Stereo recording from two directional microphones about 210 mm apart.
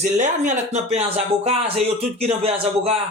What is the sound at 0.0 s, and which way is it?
Speech, 35° right (ahead or behind).